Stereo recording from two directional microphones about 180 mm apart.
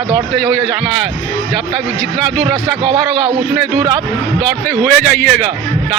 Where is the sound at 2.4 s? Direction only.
25° right (ahead or behind).